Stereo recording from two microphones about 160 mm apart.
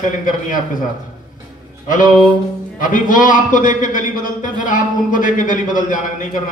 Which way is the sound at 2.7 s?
55° left (ahead or behind).